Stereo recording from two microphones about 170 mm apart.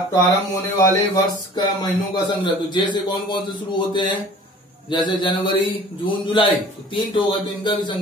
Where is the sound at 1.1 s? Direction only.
25° left (ahead or behind).